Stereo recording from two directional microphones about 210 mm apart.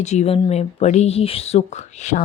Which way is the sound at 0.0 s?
30° left (ahead or behind).